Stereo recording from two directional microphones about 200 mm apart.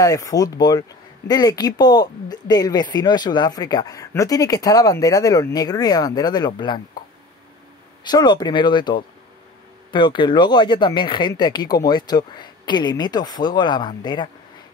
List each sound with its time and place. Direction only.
0.0 s speech: 15° left (ahead or behind)
8.0 s speech: 20° left (ahead or behind)